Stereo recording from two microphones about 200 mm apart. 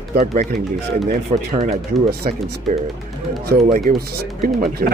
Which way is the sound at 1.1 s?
35° right (ahead or behind).